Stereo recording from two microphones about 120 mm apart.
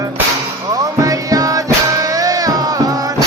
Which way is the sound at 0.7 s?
30° right (ahead or behind).